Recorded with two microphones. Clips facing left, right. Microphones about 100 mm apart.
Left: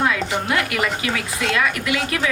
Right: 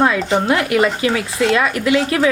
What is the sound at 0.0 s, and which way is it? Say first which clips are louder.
Speech: right 6 dB; 30° right (ahead or behind).